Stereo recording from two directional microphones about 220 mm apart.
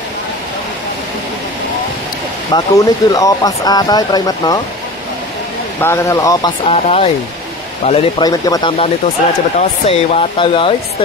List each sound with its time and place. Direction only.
2.5 s speech: 15° left (ahead or behind)
5.8 s speech: 10° left (ahead or behind)
6.7 s speech: 25° left (ahead or behind)